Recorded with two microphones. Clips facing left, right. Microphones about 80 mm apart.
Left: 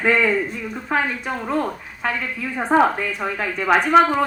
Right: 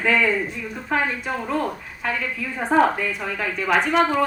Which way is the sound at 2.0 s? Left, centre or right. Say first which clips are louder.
Left 1 dB; left.